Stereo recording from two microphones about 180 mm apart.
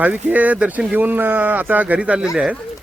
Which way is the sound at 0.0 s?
10° right (ahead or behind).